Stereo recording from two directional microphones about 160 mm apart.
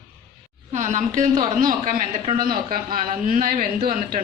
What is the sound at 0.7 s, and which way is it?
A woman's voice, 50° right (ahead or behind).